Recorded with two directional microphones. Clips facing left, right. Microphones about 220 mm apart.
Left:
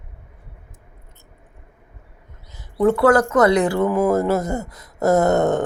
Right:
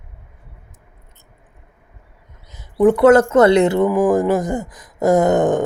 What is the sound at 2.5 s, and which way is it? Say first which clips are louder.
Speech: right 4 dB; 20° right (ahead or behind).